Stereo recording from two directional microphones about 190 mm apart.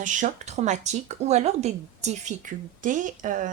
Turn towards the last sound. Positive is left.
turn(degrees=-45)  # may be behind; listen again after turning